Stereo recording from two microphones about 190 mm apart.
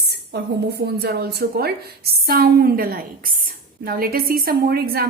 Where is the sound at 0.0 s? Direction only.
60° right (ahead or behind).